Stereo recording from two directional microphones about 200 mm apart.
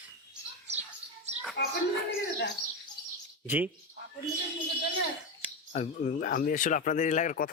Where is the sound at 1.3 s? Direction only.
35° right (ahead or behind).